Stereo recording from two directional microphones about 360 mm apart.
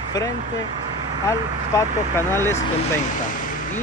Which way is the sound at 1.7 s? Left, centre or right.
Centre.